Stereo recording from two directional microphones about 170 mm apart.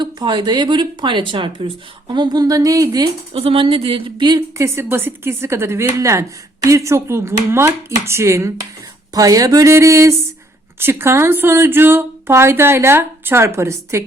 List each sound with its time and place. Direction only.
0.0 s speech: 25° right (ahead or behind)
3.3 s a woman's voice: 35° right (ahead or behind); by 14.0 s 15° right (ahead or behind)